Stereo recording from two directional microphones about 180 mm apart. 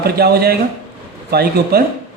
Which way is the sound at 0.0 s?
60° right (ahead or behind).